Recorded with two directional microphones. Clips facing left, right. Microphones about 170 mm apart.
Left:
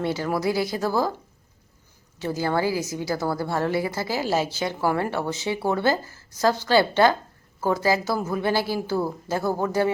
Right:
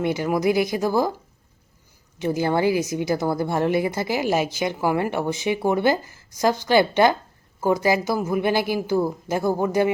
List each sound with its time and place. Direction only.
0.0 s a woman's voice: 15° right (ahead or behind)
2.1 s a woman's voice: 15° right (ahead or behind)